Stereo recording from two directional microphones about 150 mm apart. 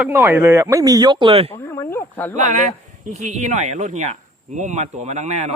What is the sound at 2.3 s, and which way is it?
Speech, 50° right (ahead or behind).